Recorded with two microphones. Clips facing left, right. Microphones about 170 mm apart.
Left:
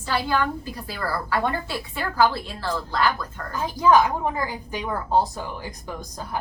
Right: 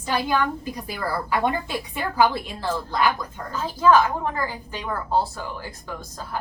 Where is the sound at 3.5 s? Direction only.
15° left (ahead or behind).